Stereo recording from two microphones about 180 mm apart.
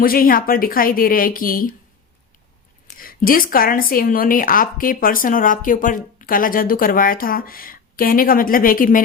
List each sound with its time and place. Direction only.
0.0 s a woman's voice: 55° left (ahead or behind)
3.0 s a woman's voice: 50° left (ahead or behind)